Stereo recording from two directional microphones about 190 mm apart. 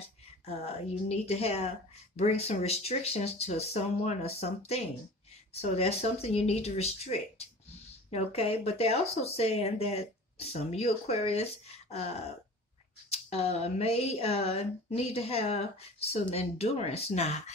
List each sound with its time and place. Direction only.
1.0 s speech: 35° left (ahead or behind)